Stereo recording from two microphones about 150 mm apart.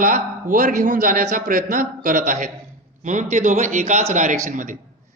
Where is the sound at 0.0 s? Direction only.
65° right (ahead or behind).